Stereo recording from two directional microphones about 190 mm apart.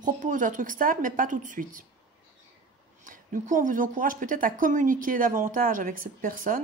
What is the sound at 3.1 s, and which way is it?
Speech, 45° right (ahead or behind).